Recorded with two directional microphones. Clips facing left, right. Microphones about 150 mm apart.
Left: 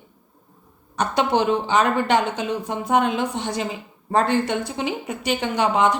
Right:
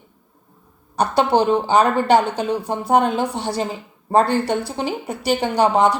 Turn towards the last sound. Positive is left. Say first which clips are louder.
# right 3 dB
turn(degrees=-35)  # may be behind; listen again after turning